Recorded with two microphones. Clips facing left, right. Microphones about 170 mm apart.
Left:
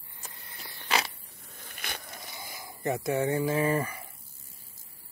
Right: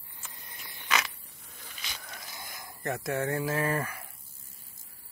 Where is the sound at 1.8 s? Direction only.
55° left (ahead or behind).